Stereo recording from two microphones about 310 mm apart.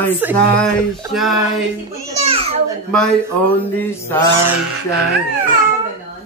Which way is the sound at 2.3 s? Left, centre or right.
Centre.